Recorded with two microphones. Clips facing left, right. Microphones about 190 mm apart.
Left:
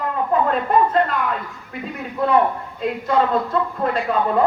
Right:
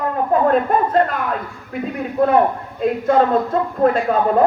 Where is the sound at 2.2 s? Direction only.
50° right (ahead or behind).